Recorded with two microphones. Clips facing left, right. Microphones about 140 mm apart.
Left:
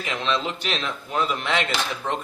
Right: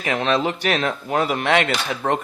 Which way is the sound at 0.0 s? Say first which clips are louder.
Right 5 dB; 60° right (ahead or behind).